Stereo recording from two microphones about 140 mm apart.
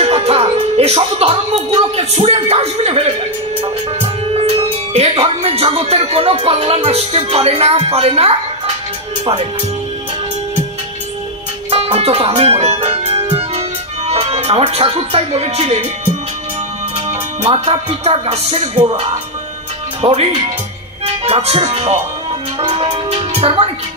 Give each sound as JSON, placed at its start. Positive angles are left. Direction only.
{"t": 0.0, "sound": "music", "side_deg": -45}
{"t": 11.7, "sound": "music", "side_deg": -45}
{"t": 17.4, "sound": "music", "side_deg": -45}
{"t": 20.0, "sound": "speech", "side_deg": -45}
{"t": 22.6, "sound": "music", "side_deg": -40}